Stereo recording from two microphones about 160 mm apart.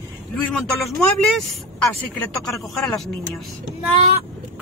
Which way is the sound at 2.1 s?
Centre (ahead or behind).